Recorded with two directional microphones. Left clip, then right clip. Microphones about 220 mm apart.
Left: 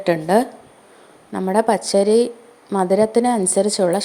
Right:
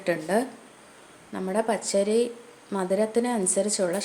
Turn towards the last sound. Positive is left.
turn(degrees=25)  # may be behind; listen again after turning